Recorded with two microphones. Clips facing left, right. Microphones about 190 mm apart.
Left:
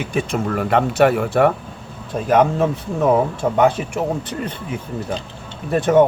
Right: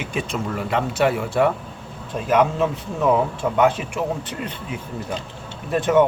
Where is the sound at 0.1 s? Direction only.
50° left (ahead or behind).